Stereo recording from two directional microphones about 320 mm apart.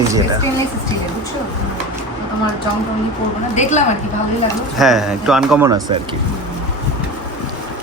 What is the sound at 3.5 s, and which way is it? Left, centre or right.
Speech, left.